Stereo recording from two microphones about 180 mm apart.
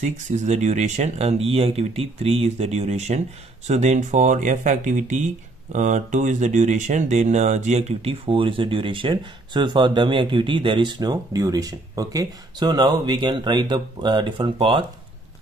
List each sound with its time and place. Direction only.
0.0 s speech: 40° right (ahead or behind)